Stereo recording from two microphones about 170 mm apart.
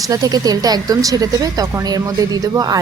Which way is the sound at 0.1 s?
20° right (ahead or behind).